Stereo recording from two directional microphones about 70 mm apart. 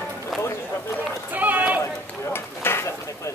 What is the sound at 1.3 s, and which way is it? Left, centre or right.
Run, right.